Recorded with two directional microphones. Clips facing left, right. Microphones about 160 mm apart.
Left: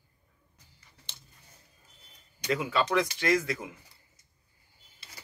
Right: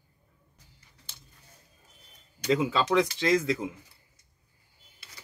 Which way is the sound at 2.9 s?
25° right (ahead or behind).